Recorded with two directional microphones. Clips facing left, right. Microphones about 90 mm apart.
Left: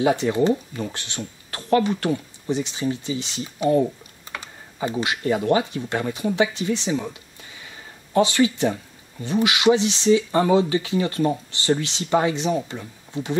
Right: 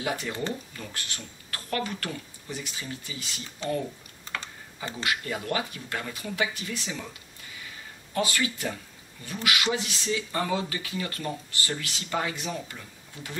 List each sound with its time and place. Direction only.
0.0 s speech: 25° left (ahead or behind)
5.0 s speech: 25° left (ahead or behind)
8.1 s speech: 25° left (ahead or behind)